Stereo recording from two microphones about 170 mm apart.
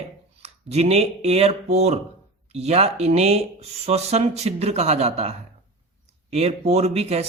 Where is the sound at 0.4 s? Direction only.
40° right (ahead or behind).